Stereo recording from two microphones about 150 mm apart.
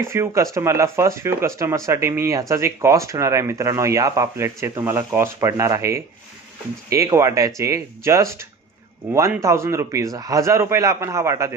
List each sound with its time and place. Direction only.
0.0 s speech: 20° right (ahead or behind)